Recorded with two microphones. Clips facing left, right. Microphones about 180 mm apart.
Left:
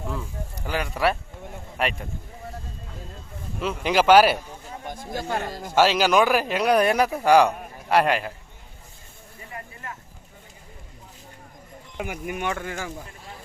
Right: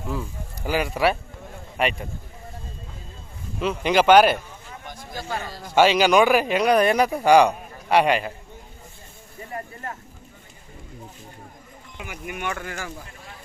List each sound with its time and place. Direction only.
0.6 s speech: 5° right (ahead or behind)
3.6 s speech: 5° left (ahead or behind)
5.1 s speech: 55° left (ahead or behind)
5.7 s speech: centre (ahead or behind)
9.5 s a sound: 40° right (ahead or behind)
11.9 s speech: 50° left (ahead or behind); by 12.9 s 20° left (ahead or behind)